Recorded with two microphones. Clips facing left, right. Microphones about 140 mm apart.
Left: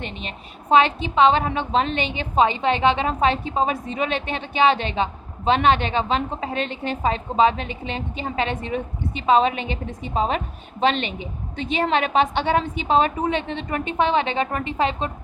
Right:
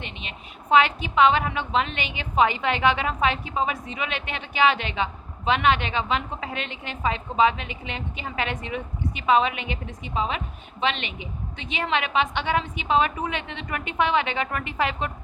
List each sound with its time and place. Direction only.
0.0 s a woman's voice: 40° left (ahead or behind)